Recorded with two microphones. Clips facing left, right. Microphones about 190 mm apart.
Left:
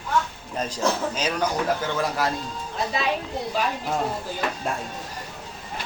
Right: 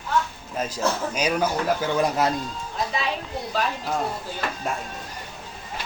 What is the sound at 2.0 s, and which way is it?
Speech, 20° right (ahead or behind).